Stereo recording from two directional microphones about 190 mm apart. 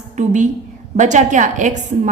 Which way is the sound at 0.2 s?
40° right (ahead or behind).